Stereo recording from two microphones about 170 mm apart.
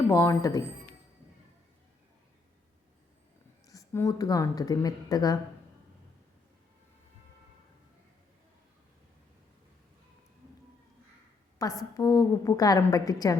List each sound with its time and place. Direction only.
0.1 s speech: 15° left (ahead or behind)
3.7 s a woman's voice: 20° left (ahead or behind)
11.6 s a woman's voice: 20° left (ahead or behind)